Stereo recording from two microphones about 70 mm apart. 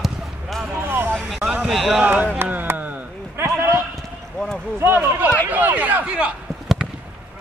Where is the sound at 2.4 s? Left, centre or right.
Right.